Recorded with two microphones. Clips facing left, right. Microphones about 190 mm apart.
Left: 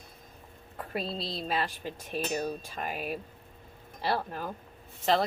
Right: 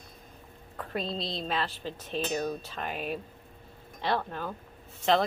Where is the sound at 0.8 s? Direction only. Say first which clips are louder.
Right 1 dB; 5° left (ahead or behind).